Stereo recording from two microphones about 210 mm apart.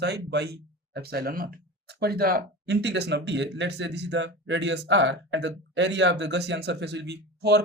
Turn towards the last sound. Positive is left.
turn(degrees=-50)  # may be behind; listen again after turning